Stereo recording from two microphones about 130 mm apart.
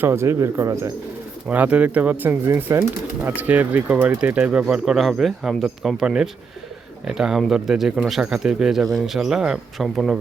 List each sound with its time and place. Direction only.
0.0 s speech: 20° right (ahead or behind)
1.5 s speech: 10° right (ahead or behind)